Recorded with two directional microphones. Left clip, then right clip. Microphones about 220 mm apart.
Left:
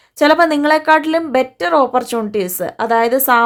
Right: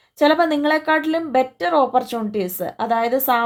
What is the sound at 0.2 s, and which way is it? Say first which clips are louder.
Speech: left 5 dB; 25° left (ahead or behind).